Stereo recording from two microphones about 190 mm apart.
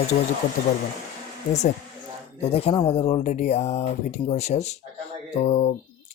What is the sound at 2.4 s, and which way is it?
Speech, 35° left (ahead or behind).